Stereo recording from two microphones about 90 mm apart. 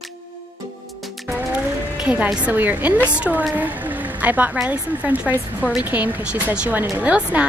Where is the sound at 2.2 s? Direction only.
15° right (ahead or behind).